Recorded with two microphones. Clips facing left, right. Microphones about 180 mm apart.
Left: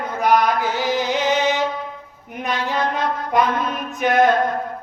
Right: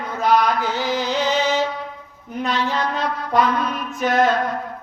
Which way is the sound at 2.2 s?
15° left (ahead or behind).